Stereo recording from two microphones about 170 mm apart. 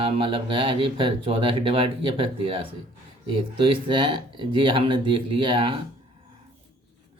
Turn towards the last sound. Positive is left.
turn(degrees=-30)  # may be behind; listen again after turning